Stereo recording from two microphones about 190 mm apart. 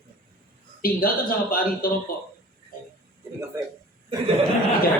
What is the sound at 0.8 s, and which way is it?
Speech, 50° left (ahead or behind).